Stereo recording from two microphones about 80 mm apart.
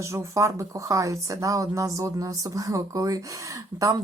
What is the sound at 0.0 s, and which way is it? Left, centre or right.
Speech, right.